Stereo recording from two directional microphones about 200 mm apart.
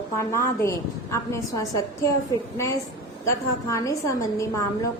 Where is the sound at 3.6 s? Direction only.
15° left (ahead or behind).